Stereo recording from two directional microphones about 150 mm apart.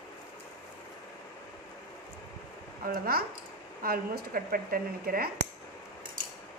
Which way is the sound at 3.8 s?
75° right (ahead or behind).